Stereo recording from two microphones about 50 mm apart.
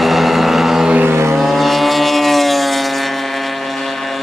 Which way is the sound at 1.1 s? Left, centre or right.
Right.